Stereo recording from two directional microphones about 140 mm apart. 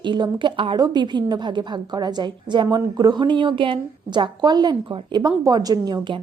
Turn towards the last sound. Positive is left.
turn(degrees=-30)  # may be behind; listen again after turning